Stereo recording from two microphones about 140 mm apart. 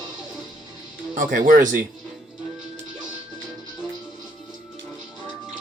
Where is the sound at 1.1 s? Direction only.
75° right (ahead or behind).